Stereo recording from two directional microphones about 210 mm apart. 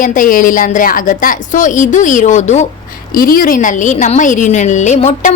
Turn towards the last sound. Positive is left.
turn(degrees=35)  # may be behind; listen again after turning